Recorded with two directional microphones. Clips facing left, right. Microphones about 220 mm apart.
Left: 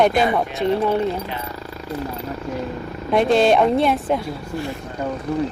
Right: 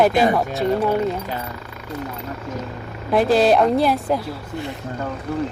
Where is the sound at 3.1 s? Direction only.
Centre (ahead or behind).